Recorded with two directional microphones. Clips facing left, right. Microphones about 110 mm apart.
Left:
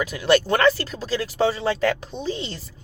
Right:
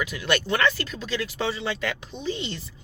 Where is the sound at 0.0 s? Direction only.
40° left (ahead or behind).